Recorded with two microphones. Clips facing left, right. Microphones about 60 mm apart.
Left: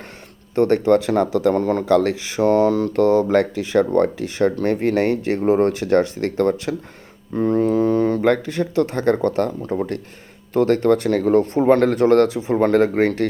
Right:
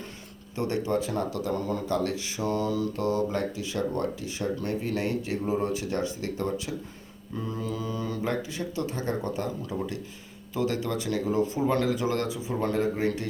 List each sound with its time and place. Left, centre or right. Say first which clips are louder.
0.5 s speech: left 12 dB; left
1.5 s speech: left 9 dB; left
7.3 s speech: left 16 dB; left